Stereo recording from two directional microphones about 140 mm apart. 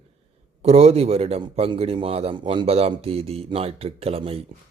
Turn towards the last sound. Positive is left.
turn(degrees=-45)  # may be behind; listen again after turning